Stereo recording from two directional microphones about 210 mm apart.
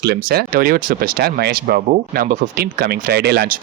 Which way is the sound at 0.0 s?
50° right (ahead or behind).